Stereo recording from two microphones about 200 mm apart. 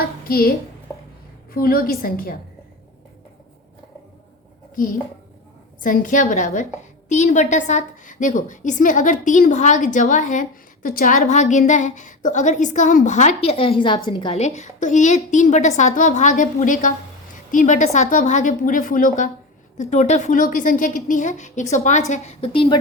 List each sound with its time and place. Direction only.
0.3 s a woman's voice: 50° left (ahead or behind)
1.5 s a woman's voice: 50° left (ahead or behind)
5.8 s a woman's voice: 40° left (ahead or behind); by 22.8 s 25° left (ahead or behind)